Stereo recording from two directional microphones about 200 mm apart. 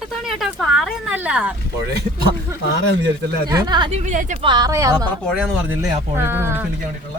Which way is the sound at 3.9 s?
35° right (ahead or behind).